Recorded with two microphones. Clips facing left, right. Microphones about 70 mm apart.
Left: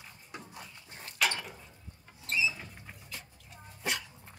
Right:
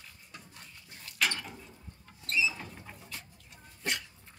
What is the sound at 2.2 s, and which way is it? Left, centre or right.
Mechanisms, centre.